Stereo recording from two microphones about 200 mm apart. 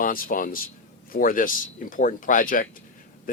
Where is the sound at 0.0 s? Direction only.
45° left (ahead or behind).